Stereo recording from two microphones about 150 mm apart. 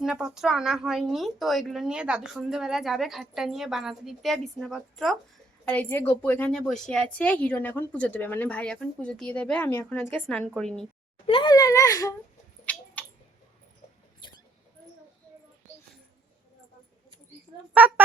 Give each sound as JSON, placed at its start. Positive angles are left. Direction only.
{"t": 0.0, "sound": "a woman's voice", "side_deg": -5}
{"t": 5.6, "sound": "a woman's voice", "side_deg": 15}
{"t": 11.3, "sound": "speech", "side_deg": 30}
{"t": 12.6, "sound": "a sound", "side_deg": 10}
{"t": 14.2, "sound": "rodents", "side_deg": 30}
{"t": 17.7, "sound": "speech", "side_deg": -10}